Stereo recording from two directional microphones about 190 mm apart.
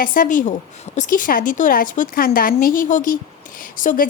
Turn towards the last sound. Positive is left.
turn(degrees=45)  # may be behind; listen again after turning